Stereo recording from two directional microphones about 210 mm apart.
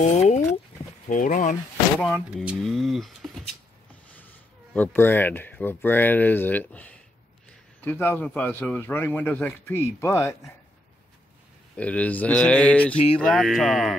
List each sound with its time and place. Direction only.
0.0 s speech: 35° left (ahead or behind)
2.0 s speech: 5° left (ahead or behind)
4.7 s a man's voice: 10° left (ahead or behind)
11.7 s a man's voice: 5° left (ahead or behind)
12.9 s a sound: 25° left (ahead or behind)
13.2 s speech: 5° left (ahead or behind)